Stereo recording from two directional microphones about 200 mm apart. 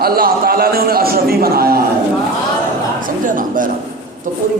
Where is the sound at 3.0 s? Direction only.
40° right (ahead or behind).